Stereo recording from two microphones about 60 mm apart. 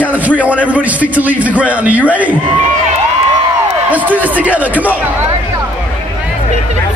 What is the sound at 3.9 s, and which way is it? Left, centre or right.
A man's voice, right.